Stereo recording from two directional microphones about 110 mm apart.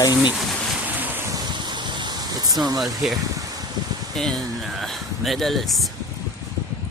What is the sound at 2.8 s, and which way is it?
Speech, centre (ahead or behind).